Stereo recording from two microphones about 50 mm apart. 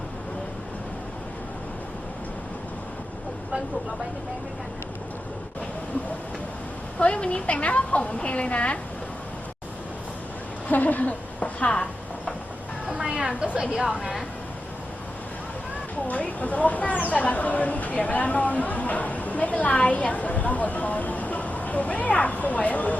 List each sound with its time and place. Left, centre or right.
7.0 s a woman's voice: left
10.7 s a woman's voice: left
12.9 s a woman's voice: right
14.0 s a woman's voice: centre
16.0 s speech: left